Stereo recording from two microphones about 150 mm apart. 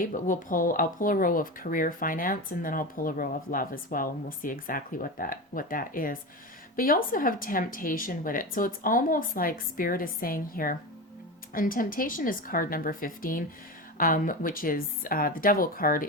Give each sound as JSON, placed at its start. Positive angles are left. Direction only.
{"t": 0.0, "sound": "speech", "side_deg": 60}